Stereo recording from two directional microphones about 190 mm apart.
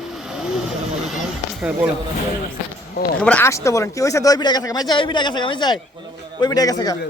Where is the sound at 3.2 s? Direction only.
10° left (ahead or behind).